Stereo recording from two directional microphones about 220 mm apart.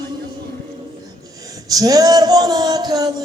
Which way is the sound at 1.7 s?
15° right (ahead or behind).